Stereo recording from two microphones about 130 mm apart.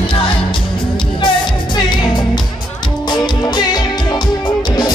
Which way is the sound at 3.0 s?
30° left (ahead or behind).